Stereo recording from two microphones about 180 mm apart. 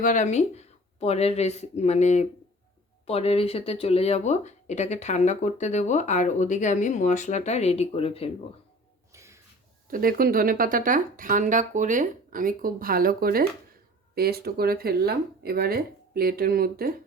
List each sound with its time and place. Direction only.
0.0 s speech: 45° left (ahead or behind)
9.1 s a sound: 15° right (ahead or behind)
9.9 s speech: 55° right (ahead or behind)